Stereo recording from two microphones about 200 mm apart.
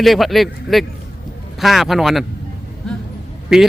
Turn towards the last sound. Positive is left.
turn(degrees=0)  # may be behind; listen again after turning